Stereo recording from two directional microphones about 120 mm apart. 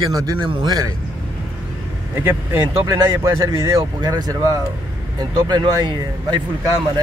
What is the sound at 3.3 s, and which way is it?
Speech, 25° right (ahead or behind).